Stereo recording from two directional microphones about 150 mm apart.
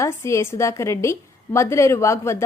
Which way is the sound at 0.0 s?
20° left (ahead or behind).